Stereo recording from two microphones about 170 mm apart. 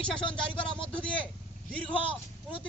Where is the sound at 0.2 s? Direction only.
30° left (ahead or behind).